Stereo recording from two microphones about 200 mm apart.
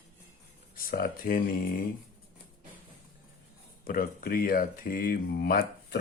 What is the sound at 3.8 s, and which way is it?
Speech, 45° left (ahead or behind).